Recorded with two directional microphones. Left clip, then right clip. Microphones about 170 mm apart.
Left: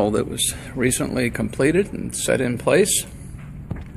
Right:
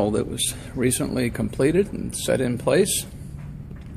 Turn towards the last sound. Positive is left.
turn(degrees=0)  # may be behind; listen again after turning